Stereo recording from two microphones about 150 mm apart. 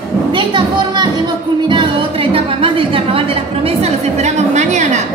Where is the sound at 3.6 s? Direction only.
45° right (ahead or behind).